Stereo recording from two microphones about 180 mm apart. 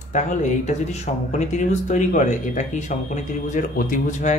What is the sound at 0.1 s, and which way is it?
Speech, 40° left (ahead or behind).